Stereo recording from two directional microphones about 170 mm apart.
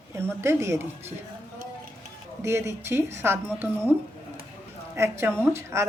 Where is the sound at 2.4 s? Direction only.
15° right (ahead or behind).